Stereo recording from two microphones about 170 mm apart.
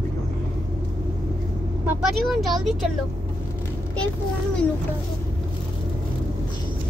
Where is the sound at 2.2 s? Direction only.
Centre (ahead or behind).